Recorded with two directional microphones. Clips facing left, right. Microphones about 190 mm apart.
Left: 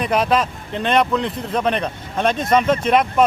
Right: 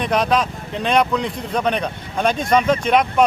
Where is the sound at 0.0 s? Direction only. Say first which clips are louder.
Even; 5° left (ahead or behind).